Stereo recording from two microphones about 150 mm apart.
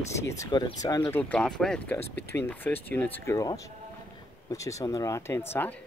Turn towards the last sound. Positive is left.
turn(degrees=15)  # may be behind; listen again after turning